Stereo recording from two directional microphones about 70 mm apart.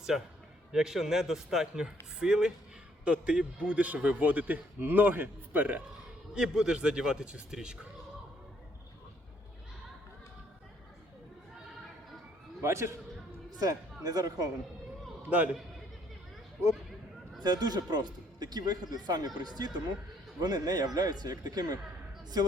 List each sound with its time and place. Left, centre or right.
0.7 s a man's voice: centre; by 5.8 s right
6.3 s a man's voice: centre
12.6 s a man's voice: right
13.6 s speech: right
17.4 s speech: right